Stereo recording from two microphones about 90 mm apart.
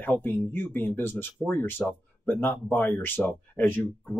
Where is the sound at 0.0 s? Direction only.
20° left (ahead or behind).